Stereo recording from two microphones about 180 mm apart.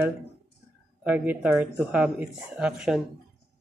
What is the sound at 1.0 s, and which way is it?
Speech, 10° right (ahead or behind).